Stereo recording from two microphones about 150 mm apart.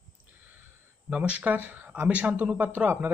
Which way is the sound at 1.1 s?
10° right (ahead or behind).